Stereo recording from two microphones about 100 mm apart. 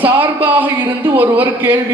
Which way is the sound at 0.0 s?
20° right (ahead or behind).